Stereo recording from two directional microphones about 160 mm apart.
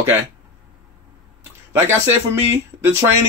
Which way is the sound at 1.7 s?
15° right (ahead or behind).